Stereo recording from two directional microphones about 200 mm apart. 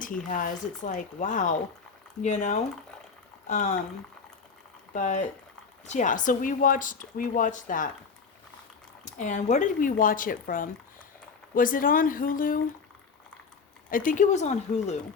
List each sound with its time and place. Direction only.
0.3 s speech: 40° left (ahead or behind)
4.9 s speech: 40° left (ahead or behind)
9.0 s speech: 40° left (ahead or behind)
13.9 s speech: 40° left (ahead or behind)